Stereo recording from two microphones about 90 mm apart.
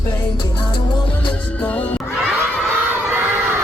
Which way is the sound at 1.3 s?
15° left (ahead or behind).